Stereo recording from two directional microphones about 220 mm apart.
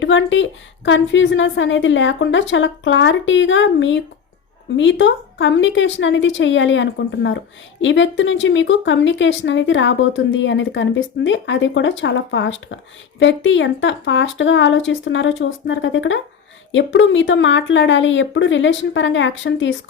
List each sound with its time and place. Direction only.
0.0 s speech: 60° left (ahead or behind)